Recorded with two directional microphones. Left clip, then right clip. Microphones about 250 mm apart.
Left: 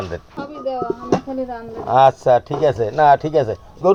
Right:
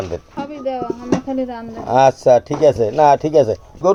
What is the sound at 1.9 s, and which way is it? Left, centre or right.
Speech, centre.